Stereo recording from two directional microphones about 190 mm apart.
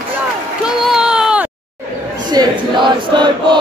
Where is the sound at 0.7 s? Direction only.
5° right (ahead or behind).